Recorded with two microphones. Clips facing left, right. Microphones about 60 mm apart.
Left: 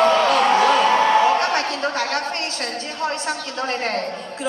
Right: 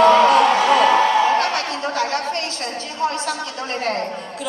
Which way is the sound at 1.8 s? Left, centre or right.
Left.